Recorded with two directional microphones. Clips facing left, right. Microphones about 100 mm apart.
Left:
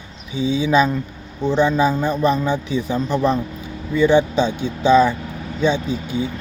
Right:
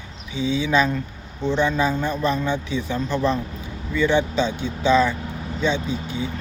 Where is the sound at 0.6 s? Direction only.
15° left (ahead or behind).